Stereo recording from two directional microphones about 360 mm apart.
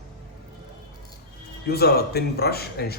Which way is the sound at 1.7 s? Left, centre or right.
Left.